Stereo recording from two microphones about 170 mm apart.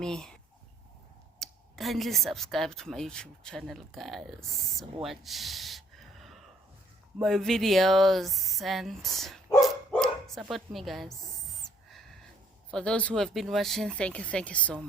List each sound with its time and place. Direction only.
0.0 s speech: 5° left (ahead or behind)
1.4 s speech: centre (ahead or behind)
5.0 s a sound: centre (ahead or behind)
7.2 s speech: centre (ahead or behind)
12.7 s speech: 5° left (ahead or behind)